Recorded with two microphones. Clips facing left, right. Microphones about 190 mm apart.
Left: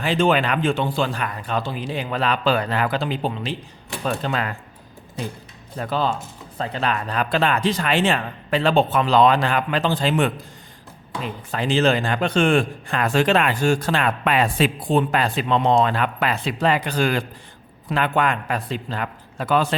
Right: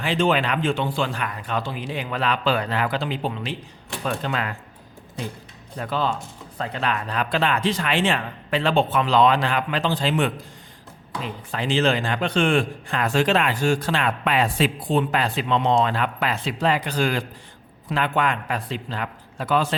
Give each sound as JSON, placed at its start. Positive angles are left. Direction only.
{"t": 0.0, "sound": "speech", "side_deg": 45}
{"t": 5.7, "sound": "speech", "side_deg": 35}